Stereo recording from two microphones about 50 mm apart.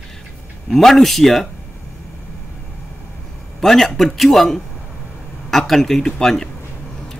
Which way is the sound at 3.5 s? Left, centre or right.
Centre.